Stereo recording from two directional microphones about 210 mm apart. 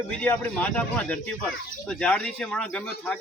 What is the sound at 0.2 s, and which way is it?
Speech, 5° left (ahead or behind).